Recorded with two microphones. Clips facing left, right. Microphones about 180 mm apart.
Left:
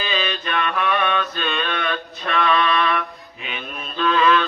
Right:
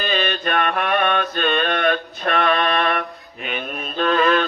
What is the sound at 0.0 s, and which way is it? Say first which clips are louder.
Mantra: right 3 dB; 55° right (ahead or behind).